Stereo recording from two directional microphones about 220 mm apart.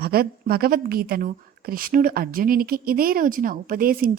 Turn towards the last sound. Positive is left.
turn(degrees=-40)  # may be behind; listen again after turning